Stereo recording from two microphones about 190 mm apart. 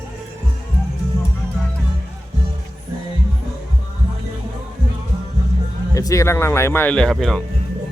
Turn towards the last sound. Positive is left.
turn(degrees=0)  # may be behind; listen again after turning